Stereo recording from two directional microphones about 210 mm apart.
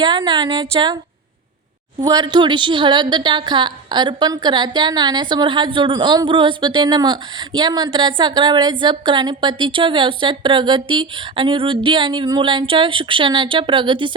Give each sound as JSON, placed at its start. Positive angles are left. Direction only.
{"t": 0.0, "sound": "a woman's voice", "side_deg": -20}
{"t": 2.0, "sound": "a woman's voice", "side_deg": -20}